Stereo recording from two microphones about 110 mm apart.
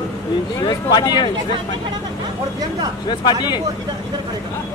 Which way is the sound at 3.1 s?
40° left (ahead or behind).